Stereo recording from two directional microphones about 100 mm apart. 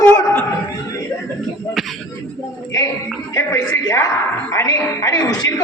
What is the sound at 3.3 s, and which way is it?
A man's voice, 30° left (ahead or behind).